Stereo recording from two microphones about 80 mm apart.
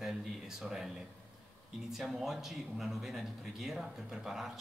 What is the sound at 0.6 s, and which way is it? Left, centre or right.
Speech, centre.